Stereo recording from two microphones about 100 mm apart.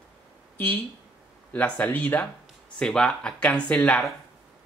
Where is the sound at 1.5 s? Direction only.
15° left (ahead or behind).